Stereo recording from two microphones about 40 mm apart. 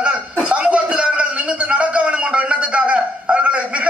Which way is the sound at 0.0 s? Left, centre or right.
Right.